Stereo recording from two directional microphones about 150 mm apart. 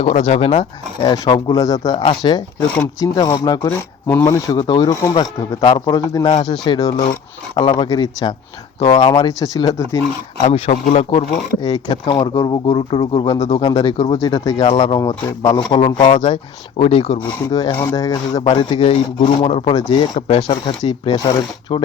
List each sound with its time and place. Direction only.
0.0 s speech: 45° left (ahead or behind)
1.0 s speech: 25° left (ahead or behind)
6.3 s speech: 45° left (ahead or behind)
7.5 s speech: 30° left (ahead or behind)
10.4 s speech: 45° left (ahead or behind)
17.5 s speech: 30° left (ahead or behind)
18.4 s speech: 35° left (ahead or behind)